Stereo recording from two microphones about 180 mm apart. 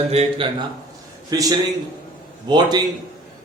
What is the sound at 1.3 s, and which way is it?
A man's voice, 20° right (ahead or behind).